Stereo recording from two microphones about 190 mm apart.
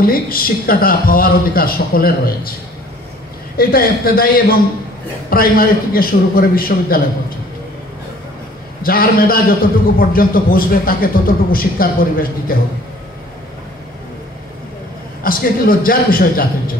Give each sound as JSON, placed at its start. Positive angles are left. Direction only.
{"t": 0.0, "sound": "a man's voice", "side_deg": 50}
{"t": 3.5, "sound": "a man's voice", "side_deg": 50}
{"t": 8.8, "sound": "a man's voice", "side_deg": 50}
{"t": 15.2, "sound": "a man's voice", "side_deg": 50}